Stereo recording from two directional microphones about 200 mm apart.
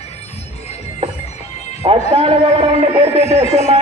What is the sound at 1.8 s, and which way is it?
A man's voice, 30° right (ahead or behind).